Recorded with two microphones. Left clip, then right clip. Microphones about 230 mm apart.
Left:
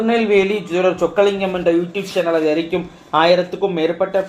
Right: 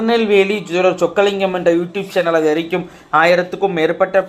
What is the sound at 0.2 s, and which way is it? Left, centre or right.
Speech, right.